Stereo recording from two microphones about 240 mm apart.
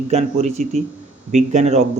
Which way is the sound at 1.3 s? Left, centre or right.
Right.